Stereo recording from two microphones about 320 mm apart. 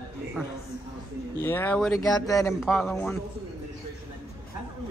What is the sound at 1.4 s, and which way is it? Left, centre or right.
Speech, centre.